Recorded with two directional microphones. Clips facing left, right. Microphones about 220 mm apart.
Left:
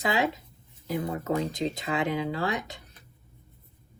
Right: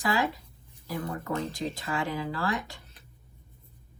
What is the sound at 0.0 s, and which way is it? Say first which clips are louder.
Speech: left 1 dB; 20° left (ahead or behind).